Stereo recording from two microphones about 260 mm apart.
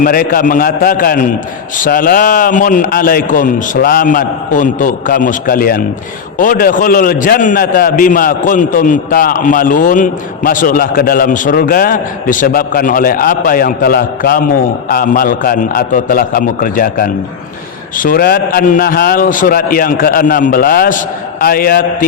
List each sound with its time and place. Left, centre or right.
0.0 s a man's voice: left